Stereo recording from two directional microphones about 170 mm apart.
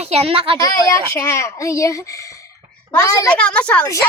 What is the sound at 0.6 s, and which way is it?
Speech, 20° left (ahead or behind).